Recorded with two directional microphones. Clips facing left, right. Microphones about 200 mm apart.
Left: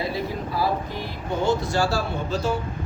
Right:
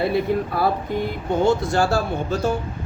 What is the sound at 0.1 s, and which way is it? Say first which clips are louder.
Speech: right 7 dB; 60° right (ahead or behind).